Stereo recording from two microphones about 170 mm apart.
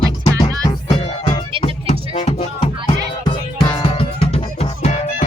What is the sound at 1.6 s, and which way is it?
Music, 40° left (ahead or behind).